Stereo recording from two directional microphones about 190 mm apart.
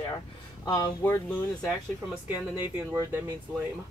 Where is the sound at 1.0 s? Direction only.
10° left (ahead or behind).